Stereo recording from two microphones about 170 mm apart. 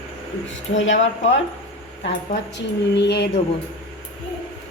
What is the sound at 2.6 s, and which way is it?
Speech, 85° left.